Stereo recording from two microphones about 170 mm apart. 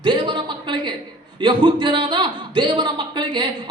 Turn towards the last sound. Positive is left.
turn(degrees=-30)  # may be behind; listen again after turning